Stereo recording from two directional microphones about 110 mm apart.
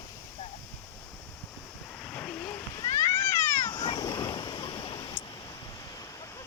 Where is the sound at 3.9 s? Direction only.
40° left (ahead or behind); by 5.0 s 60° left (ahead or behind).